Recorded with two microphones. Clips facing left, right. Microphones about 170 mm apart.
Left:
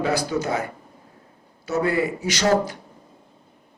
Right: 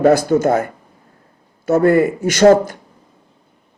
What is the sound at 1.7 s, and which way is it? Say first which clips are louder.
Speech: right 10 dB; 50° right (ahead or behind).